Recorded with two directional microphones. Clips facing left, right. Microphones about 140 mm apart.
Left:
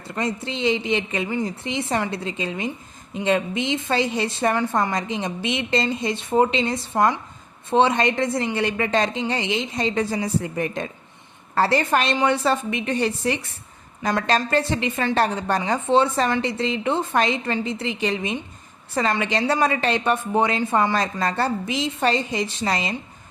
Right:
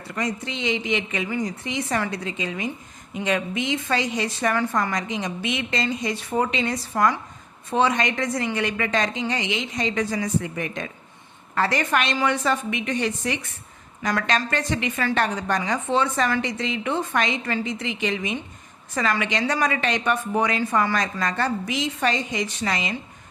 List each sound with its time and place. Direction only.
0.1 s a woman's voice: 30° left (ahead or behind)